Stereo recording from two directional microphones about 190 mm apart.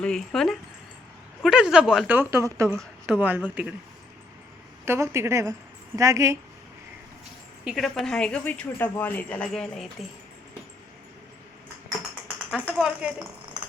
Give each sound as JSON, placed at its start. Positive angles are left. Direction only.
{"t": 0.0, "sound": "a woman's voice", "side_deg": 5}
{"t": 4.9, "sound": "a woman's voice", "side_deg": -15}
{"t": 7.6, "sound": "speech", "side_deg": 0}
{"t": 12.5, "sound": "speech", "side_deg": -5}